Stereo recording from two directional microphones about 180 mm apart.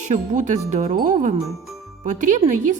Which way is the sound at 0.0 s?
45° right (ahead or behind).